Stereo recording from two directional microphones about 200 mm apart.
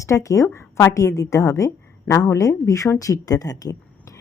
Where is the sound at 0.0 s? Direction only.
15° left (ahead or behind).